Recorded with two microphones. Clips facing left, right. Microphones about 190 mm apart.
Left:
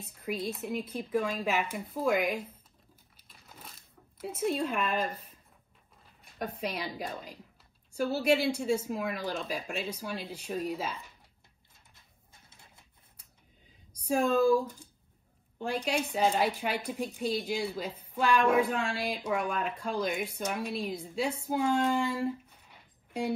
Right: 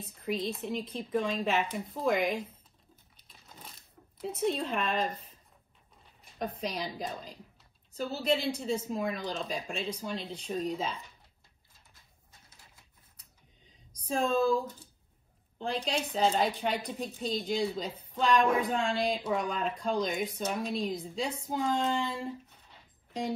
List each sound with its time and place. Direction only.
0.2 s a woman's voice: 5° left (ahead or behind)
3.2 s a sound: 5° left (ahead or behind)
6.7 s a woman's voice: 5° left (ahead or behind)
12.3 s pigeon: 25° left (ahead or behind)
14.0 s a woman's voice: 10° left (ahead or behind)